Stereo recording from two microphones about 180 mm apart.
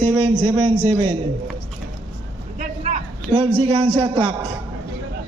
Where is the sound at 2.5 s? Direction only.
45° right (ahead or behind).